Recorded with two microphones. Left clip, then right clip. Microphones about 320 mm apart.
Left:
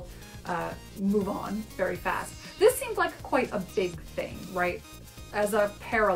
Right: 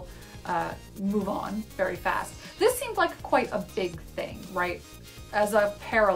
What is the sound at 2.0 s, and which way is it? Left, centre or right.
Speech, centre.